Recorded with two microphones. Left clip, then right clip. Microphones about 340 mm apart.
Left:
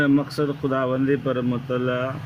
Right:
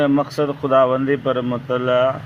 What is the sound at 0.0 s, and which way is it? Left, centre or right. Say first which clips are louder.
Speech: right 3 dB; centre.